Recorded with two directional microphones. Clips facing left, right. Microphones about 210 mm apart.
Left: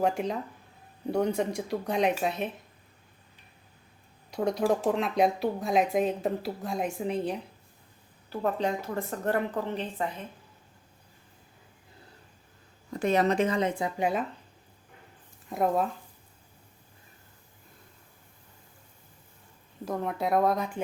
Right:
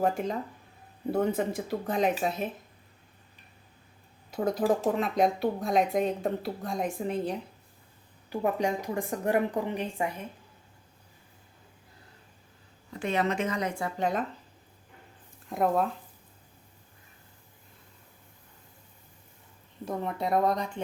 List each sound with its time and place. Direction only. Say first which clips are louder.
0.0 s speech: even; centre (ahead or behind)
4.3 s speech: even; centre (ahead or behind)
8.3 s a woman's voice: right 1 dB; 15° right (ahead or behind)
12.9 s speech: left 4 dB; 40° left (ahead or behind); by 14.3 s 10° left (ahead or behind)
15.4 s speech: even; centre (ahead or behind)
19.8 s speech: left 1 dB; centre (ahead or behind)